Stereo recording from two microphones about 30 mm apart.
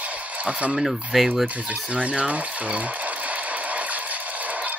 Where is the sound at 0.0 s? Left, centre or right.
Right.